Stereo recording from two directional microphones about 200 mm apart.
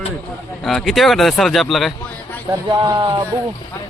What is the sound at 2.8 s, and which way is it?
Speech, 20° right (ahead or behind).